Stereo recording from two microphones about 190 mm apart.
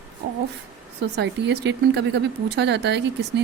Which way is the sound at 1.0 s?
65° right (ahead or behind).